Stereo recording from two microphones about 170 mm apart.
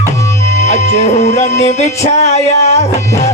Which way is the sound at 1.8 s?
40° left (ahead or behind).